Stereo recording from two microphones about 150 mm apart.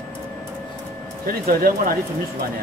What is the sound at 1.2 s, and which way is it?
Speech, 80° right.